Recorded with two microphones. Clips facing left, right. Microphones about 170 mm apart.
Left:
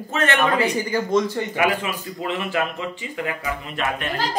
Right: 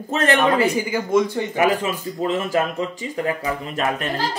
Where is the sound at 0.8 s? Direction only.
10° right (ahead or behind).